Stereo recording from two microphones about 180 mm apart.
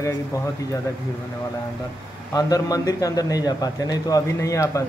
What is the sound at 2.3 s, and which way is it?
A man's voice, 20° left (ahead or behind).